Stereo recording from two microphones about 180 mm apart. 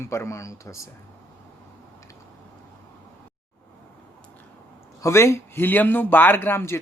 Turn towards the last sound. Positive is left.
turn(degrees=15)  # may be behind; listen again after turning